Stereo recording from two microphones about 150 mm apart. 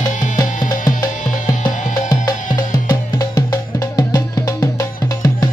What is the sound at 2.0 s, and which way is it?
Music, 25° left (ahead or behind).